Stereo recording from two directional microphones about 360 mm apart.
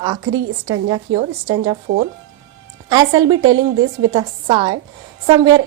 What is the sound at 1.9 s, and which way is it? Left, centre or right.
Speech, right.